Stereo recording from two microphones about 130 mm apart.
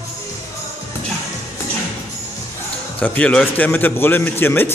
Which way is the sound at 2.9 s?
10° left (ahead or behind).